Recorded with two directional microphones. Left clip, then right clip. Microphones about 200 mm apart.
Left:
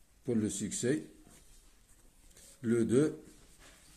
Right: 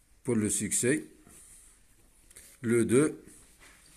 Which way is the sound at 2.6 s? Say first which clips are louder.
Right 4 dB; 25° right (ahead or behind).